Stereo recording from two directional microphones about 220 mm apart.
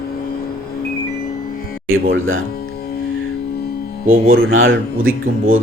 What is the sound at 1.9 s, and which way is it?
Speech, 65° right (ahead or behind).